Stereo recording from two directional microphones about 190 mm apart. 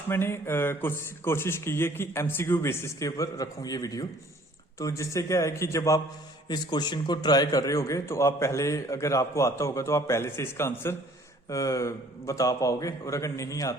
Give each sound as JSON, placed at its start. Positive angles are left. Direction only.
{"t": 0.1, "sound": "a man's voice", "side_deg": 10}